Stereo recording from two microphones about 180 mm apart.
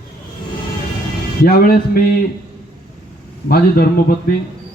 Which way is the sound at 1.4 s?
55° left (ahead or behind).